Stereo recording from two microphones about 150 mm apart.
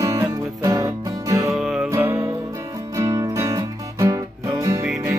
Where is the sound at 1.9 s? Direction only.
15° right (ahead or behind).